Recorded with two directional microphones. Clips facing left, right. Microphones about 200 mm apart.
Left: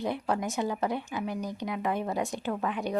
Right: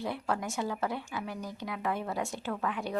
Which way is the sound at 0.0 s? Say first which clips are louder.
Left 4 dB; 20° left (ahead or behind).